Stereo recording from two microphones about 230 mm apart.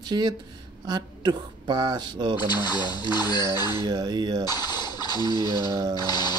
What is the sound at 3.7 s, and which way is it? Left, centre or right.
Speech, centre.